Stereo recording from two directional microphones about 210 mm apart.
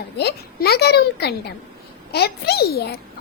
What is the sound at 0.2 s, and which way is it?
A child's voice, 50° left (ahead or behind).